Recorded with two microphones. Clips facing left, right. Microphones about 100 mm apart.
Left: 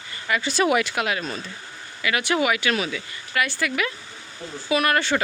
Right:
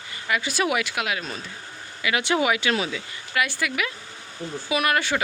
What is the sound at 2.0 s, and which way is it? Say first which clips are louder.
Speech: even; 20° right (ahead or behind).